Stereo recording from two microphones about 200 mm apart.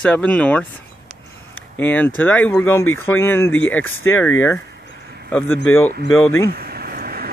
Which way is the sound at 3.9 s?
90° left.